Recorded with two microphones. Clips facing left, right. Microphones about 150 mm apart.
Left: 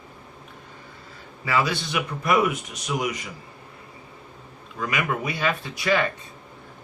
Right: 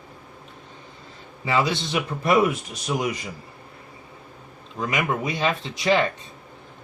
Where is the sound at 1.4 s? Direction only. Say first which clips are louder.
Right 1 dB; 25° right (ahead or behind).